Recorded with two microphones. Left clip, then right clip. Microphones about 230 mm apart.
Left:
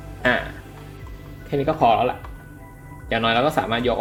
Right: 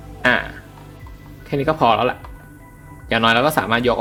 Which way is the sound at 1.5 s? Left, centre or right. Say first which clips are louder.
Right 2 dB; centre.